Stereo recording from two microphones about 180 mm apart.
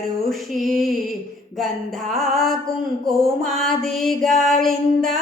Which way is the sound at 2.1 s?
Centre (ahead or behind).